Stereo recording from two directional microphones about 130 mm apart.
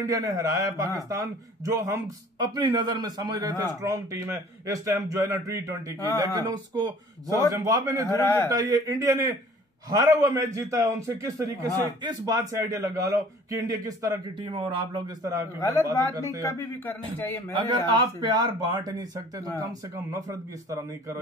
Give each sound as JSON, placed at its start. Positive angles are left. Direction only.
{"t": 0.0, "sound": "a man's voice", "side_deg": -25}
{"t": 8.2, "sound": "a man's voice", "side_deg": 20}
{"t": 8.5, "sound": "a man's voice", "side_deg": -30}
{"t": 15.6, "sound": "a man's voice", "side_deg": 25}
{"t": 18.2, "sound": "a man's voice", "side_deg": -30}